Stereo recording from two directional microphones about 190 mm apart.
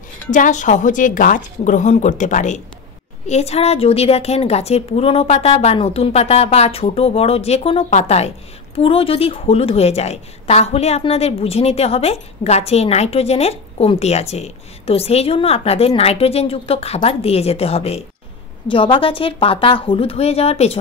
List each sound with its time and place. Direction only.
0.3 s a woman's voice: 40° left (ahead or behind)